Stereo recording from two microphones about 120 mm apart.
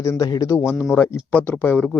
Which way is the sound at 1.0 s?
15° left (ahead or behind).